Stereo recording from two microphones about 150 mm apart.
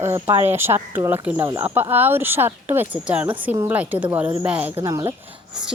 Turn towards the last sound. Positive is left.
turn(degrees=-20)  # may be behind; listen again after turning